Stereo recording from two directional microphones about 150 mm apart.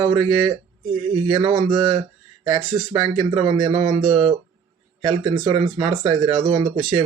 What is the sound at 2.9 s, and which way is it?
Speech, 35° right (ahead or behind).